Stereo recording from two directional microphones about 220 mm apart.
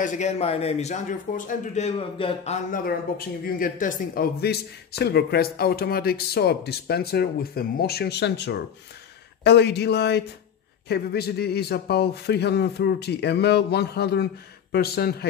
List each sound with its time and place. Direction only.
0.0 s speech: 35° left (ahead or behind)